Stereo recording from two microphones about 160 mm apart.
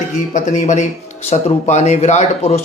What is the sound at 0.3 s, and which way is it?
Speech, 50° left (ahead or behind).